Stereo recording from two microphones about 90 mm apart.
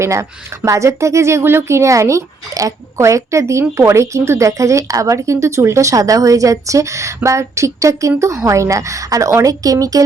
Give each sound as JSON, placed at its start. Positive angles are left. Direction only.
{"t": 0.0, "sound": "speech", "side_deg": -35}